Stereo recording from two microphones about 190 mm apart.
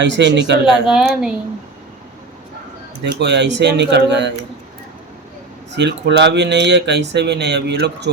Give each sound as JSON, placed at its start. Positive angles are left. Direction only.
{"t": 0.0, "sound": "speech", "side_deg": -70}
{"t": 0.6, "sound": "speech", "side_deg": -5}
{"t": 3.0, "sound": "speech", "side_deg": -65}
{"t": 5.7, "sound": "speech", "side_deg": -65}